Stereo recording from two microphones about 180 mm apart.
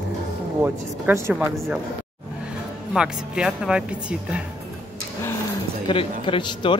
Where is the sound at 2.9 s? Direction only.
5° right (ahead or behind).